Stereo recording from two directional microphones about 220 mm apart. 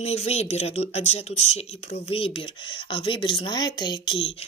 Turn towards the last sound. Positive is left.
turn(degrees=20)  # may be behind; listen again after turning